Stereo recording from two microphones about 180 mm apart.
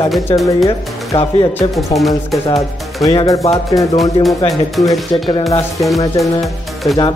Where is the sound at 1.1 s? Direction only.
35° left (ahead or behind).